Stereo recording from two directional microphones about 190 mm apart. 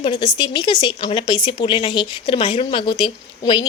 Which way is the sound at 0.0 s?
25° left (ahead or behind).